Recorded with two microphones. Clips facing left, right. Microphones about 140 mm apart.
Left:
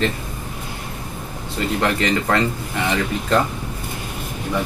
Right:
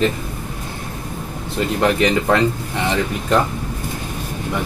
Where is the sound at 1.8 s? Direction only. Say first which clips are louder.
Right 4 dB; 20° right (ahead or behind).